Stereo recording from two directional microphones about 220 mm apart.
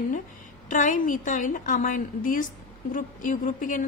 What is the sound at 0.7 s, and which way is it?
A woman's voice, 35° left (ahead or behind).